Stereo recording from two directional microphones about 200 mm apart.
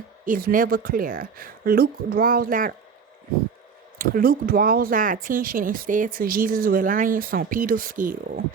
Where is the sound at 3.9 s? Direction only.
45° right (ahead or behind).